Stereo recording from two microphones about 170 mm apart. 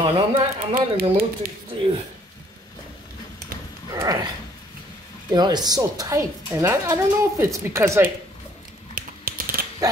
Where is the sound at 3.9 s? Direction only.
20° right (ahead or behind).